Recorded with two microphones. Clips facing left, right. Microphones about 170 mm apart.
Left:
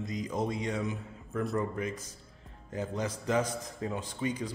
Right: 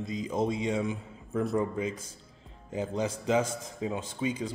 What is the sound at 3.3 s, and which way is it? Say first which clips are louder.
Speech: right 2 dB; 10° right (ahead or behind).